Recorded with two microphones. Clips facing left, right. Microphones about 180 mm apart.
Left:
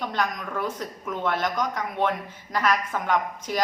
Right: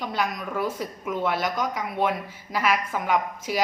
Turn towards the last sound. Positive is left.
turn(degrees=-10)  # may be behind; listen again after turning